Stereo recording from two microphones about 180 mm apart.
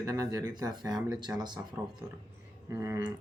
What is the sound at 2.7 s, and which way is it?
Speech, 15° right (ahead or behind).